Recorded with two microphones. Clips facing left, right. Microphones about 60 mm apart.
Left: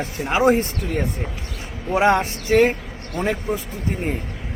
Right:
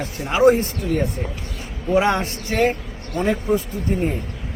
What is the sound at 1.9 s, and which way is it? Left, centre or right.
Speech, left.